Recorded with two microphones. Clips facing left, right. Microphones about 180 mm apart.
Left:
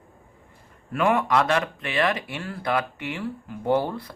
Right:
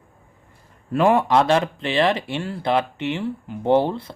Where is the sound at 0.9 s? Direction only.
30° right (ahead or behind).